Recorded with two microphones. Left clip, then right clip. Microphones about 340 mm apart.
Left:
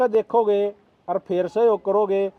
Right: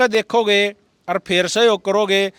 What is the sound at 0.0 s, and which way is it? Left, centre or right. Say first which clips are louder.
A man's voice: right 3 dB; right.